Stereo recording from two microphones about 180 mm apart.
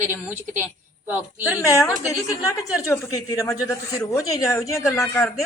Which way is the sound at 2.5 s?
15° left (ahead or behind).